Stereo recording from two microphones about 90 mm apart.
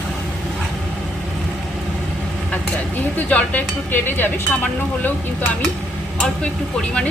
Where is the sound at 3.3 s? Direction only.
15° left (ahead or behind).